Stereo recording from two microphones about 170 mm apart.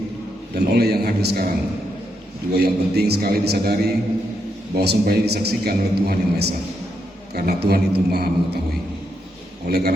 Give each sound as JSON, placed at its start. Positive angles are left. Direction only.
{"t": 0.5, "sound": "a man's voice", "side_deg": -70}
{"t": 2.5, "sound": "a man's voice", "side_deg": -70}
{"t": 4.8, "sound": "a man's voice", "side_deg": -70}
{"t": 9.6, "sound": "a man's voice", "side_deg": -70}